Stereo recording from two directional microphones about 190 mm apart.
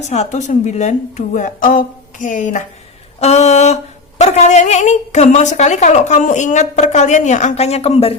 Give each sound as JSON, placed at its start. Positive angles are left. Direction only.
{"t": 0.1, "sound": "a woman's voice", "side_deg": 35}